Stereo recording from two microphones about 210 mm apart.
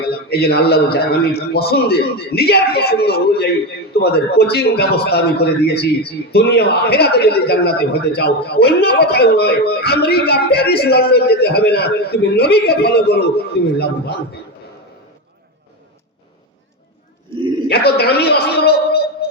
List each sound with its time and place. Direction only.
0.1 s a man's voice: 50° left (ahead or behind)
17.7 s a man's voice: 50° left (ahead or behind)